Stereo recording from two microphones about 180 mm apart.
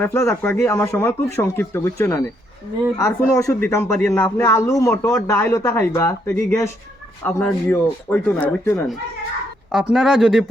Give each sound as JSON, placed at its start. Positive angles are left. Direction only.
{"t": 0.0, "sound": "a man's voice", "side_deg": 15}
{"t": 9.7, "sound": "speech", "side_deg": 0}